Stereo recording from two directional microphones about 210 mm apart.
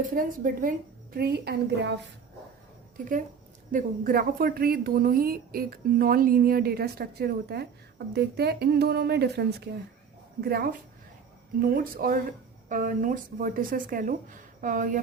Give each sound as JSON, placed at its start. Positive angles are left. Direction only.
{"t": 0.1, "sound": "speech", "side_deg": -40}
{"t": 3.0, "sound": "a woman's voice", "side_deg": -40}